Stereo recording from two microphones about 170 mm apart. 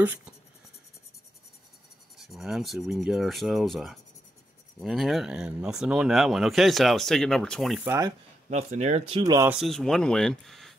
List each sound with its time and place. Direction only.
0.0 s speech: 10° right (ahead or behind)
2.1 s speech: centre (ahead or behind)
7.8 s speech: 15° right (ahead or behind)
8.5 s speech: 40° right (ahead or behind)
9.2 s speech: 20° right (ahead or behind)
9.5 s speech: centre (ahead or behind)